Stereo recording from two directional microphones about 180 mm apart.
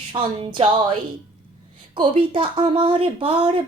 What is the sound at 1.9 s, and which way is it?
A woman's voice, 30° right (ahead or behind).